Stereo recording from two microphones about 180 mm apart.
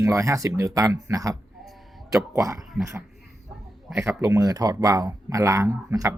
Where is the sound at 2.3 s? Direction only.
15° right (ahead or behind).